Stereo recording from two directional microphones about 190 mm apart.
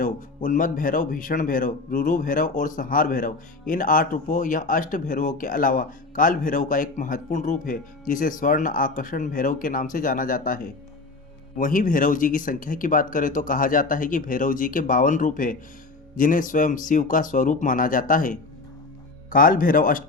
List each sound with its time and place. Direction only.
0.0 s speech: 45° left (ahead or behind)